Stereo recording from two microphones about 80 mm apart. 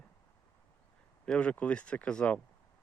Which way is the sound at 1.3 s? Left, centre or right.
Centre.